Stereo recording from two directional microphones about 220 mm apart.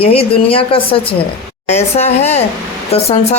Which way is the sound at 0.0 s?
25° left (ahead or behind).